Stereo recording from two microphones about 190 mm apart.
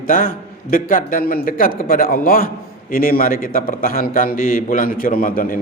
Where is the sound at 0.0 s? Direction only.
45° left (ahead or behind).